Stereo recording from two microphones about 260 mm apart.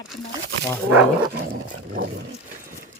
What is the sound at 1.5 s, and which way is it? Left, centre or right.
Dog, right.